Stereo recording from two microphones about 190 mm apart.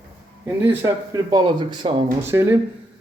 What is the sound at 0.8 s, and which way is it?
Speech, 20° right (ahead or behind).